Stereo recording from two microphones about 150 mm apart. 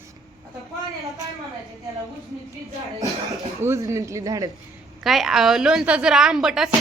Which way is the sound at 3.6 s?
20° right (ahead or behind).